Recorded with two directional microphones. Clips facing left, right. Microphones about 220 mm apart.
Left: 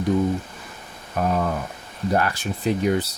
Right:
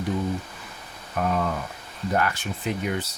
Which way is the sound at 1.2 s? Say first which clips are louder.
Left 3 dB; 35° left (ahead or behind).